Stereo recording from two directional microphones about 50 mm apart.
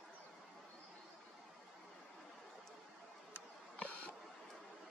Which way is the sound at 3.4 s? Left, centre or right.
Left.